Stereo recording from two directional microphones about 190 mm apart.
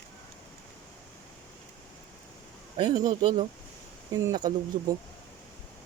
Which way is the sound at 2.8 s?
20° right (ahead or behind).